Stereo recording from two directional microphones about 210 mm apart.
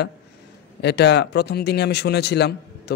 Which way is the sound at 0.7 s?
55° left (ahead or behind).